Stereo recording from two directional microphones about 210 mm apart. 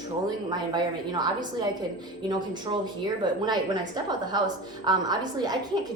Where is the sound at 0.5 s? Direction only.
20° right (ahead or behind).